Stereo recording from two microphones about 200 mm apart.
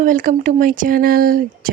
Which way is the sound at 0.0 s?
40° right (ahead or behind).